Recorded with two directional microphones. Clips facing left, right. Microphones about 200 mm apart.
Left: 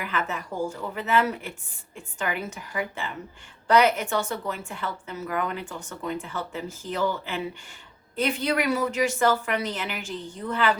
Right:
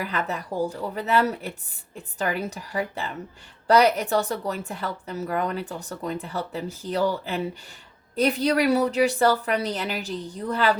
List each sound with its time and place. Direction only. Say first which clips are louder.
0.0 s a woman's voice: right 2 dB; 35° right (ahead or behind)